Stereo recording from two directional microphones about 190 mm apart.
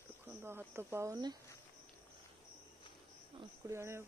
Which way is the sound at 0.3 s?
10° right (ahead or behind).